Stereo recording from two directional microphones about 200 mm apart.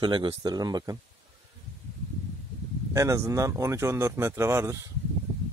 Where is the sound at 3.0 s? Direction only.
15° right (ahead or behind).